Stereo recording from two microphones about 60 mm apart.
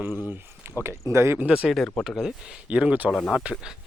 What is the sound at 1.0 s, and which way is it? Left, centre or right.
Speech, right.